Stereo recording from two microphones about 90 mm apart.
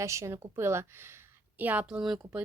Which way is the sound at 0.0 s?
35° right (ahead or behind).